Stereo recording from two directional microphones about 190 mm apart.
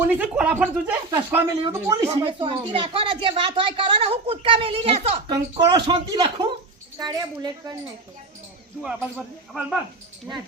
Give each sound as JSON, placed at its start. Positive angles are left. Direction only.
{"t": 0.0, "sound": "speech", "side_deg": -10}
{"t": 2.2, "sound": "speech", "side_deg": -30}
{"t": 8.8, "sound": "speech", "side_deg": -5}